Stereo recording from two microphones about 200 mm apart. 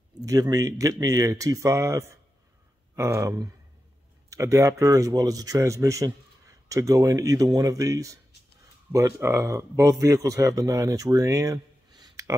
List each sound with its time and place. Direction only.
0.2 s speech: 20° right (ahead or behind)